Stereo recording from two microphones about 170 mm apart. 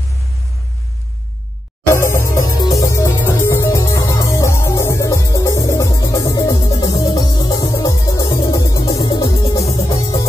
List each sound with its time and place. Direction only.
2.0 s music: 15° left (ahead or behind)